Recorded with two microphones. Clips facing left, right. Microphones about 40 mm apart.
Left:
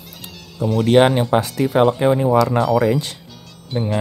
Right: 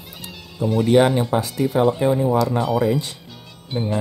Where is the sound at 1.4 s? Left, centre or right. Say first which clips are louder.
Left 3 dB; left.